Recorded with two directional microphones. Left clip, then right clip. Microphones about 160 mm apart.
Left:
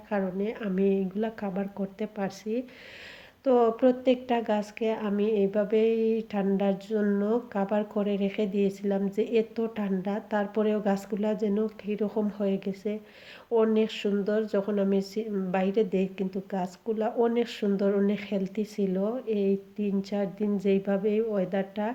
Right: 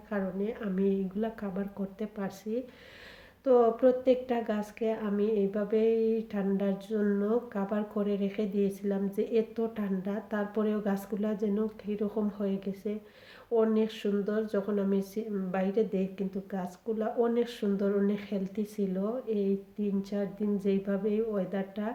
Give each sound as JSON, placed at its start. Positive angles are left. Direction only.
{"t": 0.1, "sound": "speech", "side_deg": 35}